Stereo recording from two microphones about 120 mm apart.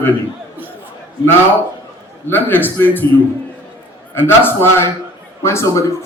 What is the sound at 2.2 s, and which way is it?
Speech, 15° left (ahead or behind).